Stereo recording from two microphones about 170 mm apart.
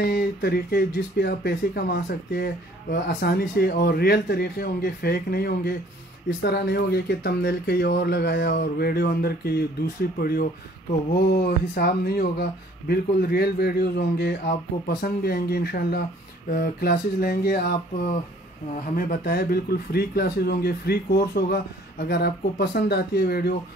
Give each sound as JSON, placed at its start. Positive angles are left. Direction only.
{"t": 0.0, "sound": "speech", "side_deg": 70}
{"t": 15.0, "sound": "speech", "side_deg": 65}
{"t": 18.9, "sound": "speech", "side_deg": 60}